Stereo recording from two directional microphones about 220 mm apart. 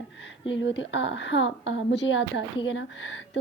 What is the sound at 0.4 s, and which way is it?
A woman's voice, 55° left (ahead or behind).